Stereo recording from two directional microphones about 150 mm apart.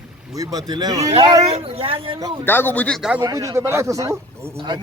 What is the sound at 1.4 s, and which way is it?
Speech, 40° right (ahead or behind).